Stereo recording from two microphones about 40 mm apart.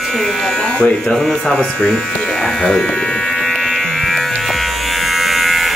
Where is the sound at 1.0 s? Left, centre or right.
Centre.